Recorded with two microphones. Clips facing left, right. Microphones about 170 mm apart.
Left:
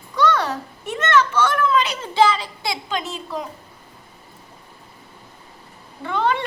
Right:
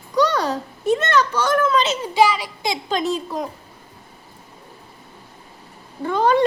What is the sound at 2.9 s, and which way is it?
Speech, 40° right (ahead or behind).